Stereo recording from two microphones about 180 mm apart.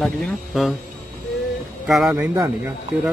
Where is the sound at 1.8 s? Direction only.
Centre (ahead or behind).